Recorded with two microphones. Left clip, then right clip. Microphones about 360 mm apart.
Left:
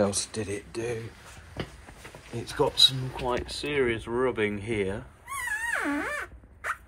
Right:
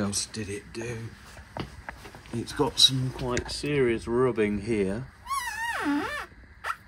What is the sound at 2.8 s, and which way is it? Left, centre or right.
Speech, centre.